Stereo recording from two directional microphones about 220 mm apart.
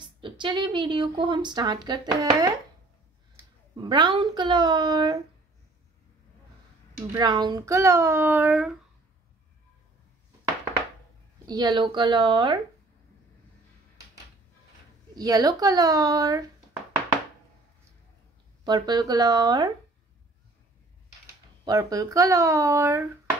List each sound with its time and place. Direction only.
0.0 s a woman's voice: 20° right (ahead or behind)
3.7 s a woman's voice: 20° right (ahead or behind)
7.0 s a child's voice: 15° right (ahead or behind)
11.4 s a woman's voice: 20° right (ahead or behind)
15.1 s a child's voice: 15° right (ahead or behind)
18.6 s a woman's voice: 20° right (ahead or behind)
21.6 s a child's voice: 15° right (ahead or behind)